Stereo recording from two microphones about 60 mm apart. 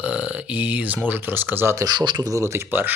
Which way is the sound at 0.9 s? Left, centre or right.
Right.